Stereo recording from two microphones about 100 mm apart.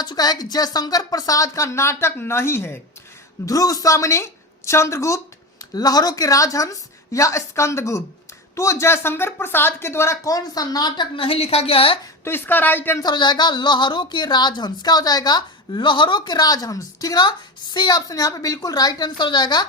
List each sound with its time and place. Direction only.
0.0 s a woman's voice: 40° left (ahead or behind); by 2.7 s 25° left (ahead or behind)
3.4 s a woman's voice: 35° left (ahead or behind)
5.7 s a woman's voice: 40° left (ahead or behind)
11.3 s a woman's voice: 90° left; by 11.9 s 70° left (ahead or behind)
12.2 s speech: 20° left (ahead or behind)
13.0 s a woman's voice: 45° left (ahead or behind)